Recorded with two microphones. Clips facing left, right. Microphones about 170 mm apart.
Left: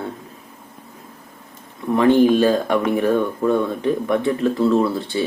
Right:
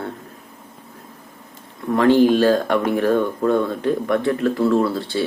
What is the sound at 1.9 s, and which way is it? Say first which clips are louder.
Speech: even; 15° left (ahead or behind).